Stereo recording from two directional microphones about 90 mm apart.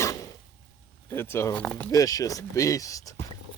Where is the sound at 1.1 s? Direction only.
25° left (ahead or behind).